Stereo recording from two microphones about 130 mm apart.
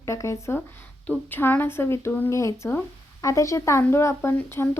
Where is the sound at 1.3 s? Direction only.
15° left (ahead or behind).